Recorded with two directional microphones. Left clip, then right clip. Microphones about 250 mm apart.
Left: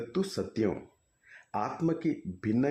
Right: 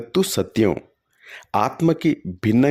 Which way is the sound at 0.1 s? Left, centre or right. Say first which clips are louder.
Right 15 dB; right.